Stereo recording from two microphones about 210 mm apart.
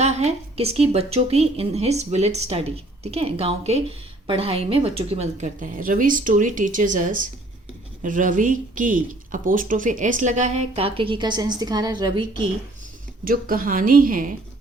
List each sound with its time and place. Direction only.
0.0 s a woman's voice: 30° right (ahead or behind)
13.2 s a woman's voice: 40° right (ahead or behind)